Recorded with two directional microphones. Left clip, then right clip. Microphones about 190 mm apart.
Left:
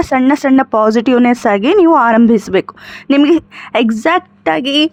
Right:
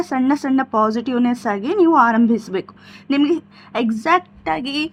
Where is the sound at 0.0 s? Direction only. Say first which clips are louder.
Left 8 dB; 40° left (ahead or behind).